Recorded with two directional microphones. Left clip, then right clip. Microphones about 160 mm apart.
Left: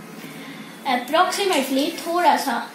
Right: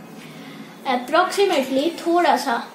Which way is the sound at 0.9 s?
80° right.